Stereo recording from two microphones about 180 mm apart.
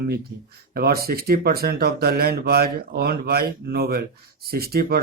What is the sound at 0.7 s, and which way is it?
Speech, 60° right (ahead or behind).